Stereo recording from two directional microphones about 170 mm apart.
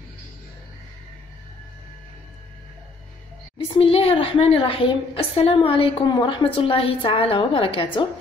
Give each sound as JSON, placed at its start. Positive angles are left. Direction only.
{"t": 3.5, "sound": "a woman's voice", "side_deg": 30}